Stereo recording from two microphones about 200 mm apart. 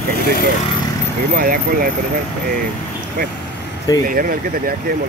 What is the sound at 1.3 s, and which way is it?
Speech, 45° right (ahead or behind).